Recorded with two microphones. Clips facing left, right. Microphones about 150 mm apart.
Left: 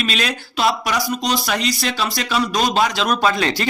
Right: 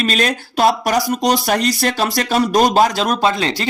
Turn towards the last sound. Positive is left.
turn(degrees=-25)  # may be behind; listen again after turning